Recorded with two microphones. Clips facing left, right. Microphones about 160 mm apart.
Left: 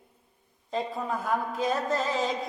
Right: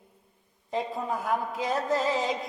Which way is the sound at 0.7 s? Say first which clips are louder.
Even; 15° right (ahead or behind).